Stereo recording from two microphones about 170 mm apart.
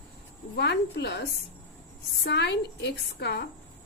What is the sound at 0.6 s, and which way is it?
A woman's voice, 80° left.